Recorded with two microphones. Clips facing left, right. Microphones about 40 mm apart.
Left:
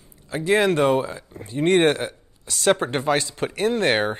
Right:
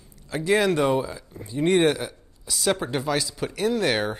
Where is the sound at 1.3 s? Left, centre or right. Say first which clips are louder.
Left 2 dB; left.